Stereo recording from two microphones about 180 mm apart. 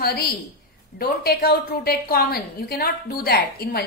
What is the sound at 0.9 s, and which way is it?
A woman's voice, 60° left (ahead or behind).